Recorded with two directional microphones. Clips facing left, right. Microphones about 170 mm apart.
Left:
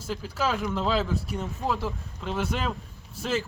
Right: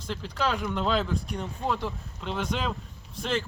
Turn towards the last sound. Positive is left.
turn(degrees=5)  # may be behind; listen again after turning